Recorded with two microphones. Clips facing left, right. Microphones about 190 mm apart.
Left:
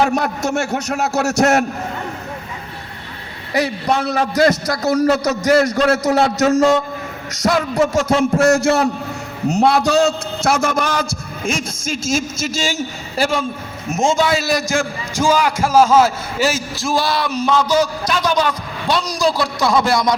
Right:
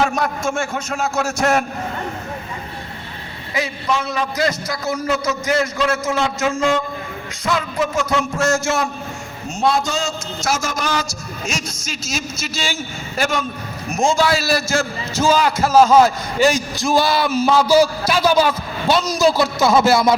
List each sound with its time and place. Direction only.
0.1 s a man's voice: 70° left (ahead or behind)
3.5 s a man's voice: 65° left (ahead or behind)
5.5 s a man's voice: 40° left (ahead or behind)
5.9 s a man's voice: 70° left (ahead or behind)
6.4 s a man's voice: 40° left (ahead or behind)
8.4 s a man's voice: 65° left (ahead or behind); by 13.4 s 35° left (ahead or behind)
13.8 s a man's voice: 20° left (ahead or behind); by 20.1 s 5° right (ahead or behind)